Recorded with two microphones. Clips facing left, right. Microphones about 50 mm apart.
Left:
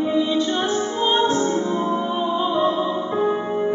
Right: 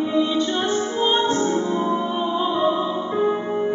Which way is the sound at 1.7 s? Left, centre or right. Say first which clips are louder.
Even; right.